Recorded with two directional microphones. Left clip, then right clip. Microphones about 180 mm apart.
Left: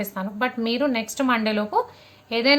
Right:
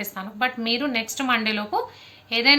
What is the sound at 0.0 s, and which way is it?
A woman's voice, 60° left (ahead or behind).